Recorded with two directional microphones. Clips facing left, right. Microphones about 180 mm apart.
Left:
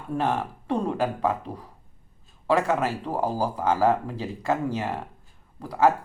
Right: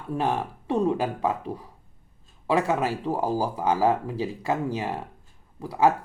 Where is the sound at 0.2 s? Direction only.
10° right (ahead or behind).